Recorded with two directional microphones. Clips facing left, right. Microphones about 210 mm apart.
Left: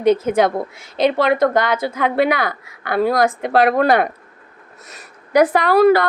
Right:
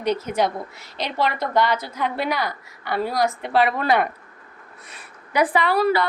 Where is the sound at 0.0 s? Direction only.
50° left (ahead or behind).